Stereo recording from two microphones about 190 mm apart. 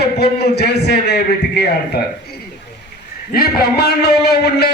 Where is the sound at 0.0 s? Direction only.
60° left (ahead or behind).